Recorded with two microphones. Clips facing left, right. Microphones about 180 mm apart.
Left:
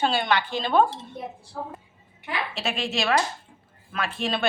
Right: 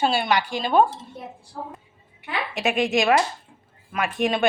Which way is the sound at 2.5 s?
15° right (ahead or behind).